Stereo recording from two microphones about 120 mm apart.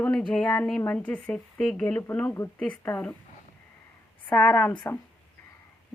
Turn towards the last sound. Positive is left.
turn(degrees=15)  # may be behind; listen again after turning